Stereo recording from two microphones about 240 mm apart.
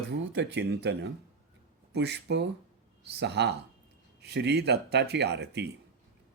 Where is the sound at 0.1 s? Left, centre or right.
Right.